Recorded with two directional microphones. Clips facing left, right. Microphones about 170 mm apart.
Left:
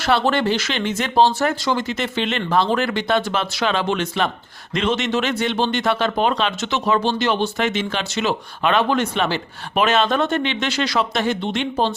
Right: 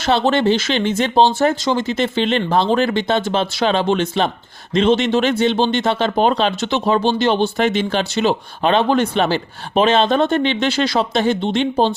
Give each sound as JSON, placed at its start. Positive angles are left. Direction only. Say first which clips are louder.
{"t": 0.0, "sound": "speech", "louder": "right 3 dB", "side_deg": -20}